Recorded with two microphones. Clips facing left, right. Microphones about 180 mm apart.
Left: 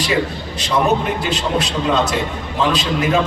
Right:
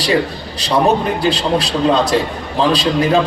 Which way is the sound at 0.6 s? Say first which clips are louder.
Right 3 dB; 35° right (ahead or behind).